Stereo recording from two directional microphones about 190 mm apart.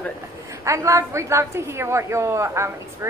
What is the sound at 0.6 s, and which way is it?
A woman's voice, 15° right (ahead or behind).